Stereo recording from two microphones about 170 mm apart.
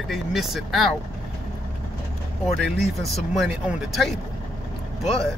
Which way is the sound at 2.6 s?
Centre (ahead or behind).